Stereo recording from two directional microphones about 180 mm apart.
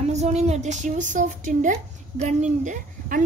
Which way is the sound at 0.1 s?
40° right (ahead or behind).